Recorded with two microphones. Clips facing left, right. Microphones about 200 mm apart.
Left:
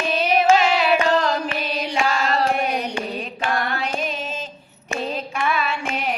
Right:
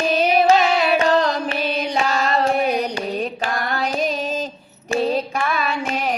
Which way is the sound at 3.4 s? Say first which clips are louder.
Right 1 dB; 40° right (ahead or behind).